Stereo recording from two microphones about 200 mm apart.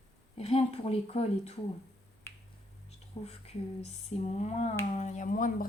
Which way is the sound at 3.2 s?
30° left (ahead or behind).